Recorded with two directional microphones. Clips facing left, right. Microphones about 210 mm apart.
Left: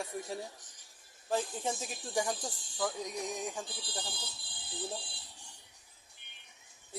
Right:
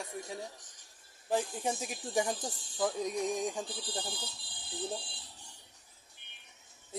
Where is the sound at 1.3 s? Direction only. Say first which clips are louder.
Right 1 dB; 15° right (ahead or behind).